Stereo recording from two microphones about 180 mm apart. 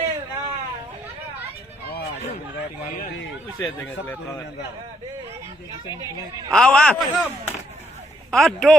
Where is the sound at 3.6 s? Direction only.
10° left (ahead or behind).